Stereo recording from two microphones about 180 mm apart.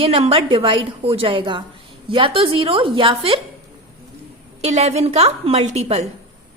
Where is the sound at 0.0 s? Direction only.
30° right (ahead or behind).